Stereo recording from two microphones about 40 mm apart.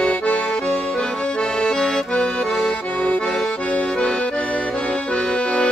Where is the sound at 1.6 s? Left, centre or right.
Centre.